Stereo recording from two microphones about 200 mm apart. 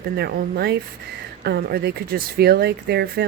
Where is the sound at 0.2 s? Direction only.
55° right (ahead or behind).